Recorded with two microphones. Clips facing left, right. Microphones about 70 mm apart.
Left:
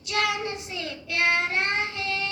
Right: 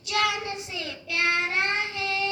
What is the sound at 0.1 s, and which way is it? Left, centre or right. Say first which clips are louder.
Child singing: even; left.